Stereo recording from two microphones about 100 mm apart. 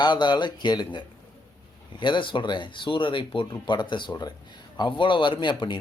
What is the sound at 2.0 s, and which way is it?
A man's voice, 50° left (ahead or behind).